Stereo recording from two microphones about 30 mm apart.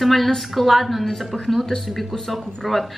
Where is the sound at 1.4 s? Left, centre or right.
Centre.